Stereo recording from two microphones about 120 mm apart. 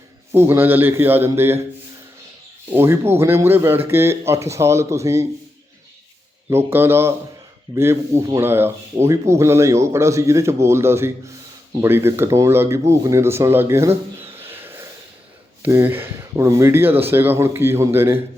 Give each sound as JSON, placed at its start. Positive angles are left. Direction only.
{"t": 0.3, "sound": "speech", "side_deg": -20}
{"t": 2.6, "sound": "speech", "side_deg": -20}
{"t": 6.5, "sound": "speech", "side_deg": -20}